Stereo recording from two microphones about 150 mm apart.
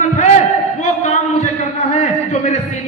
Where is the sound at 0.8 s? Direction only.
55° left (ahead or behind).